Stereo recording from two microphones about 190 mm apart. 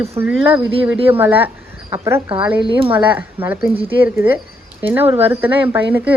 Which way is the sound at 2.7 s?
30° right (ahead or behind).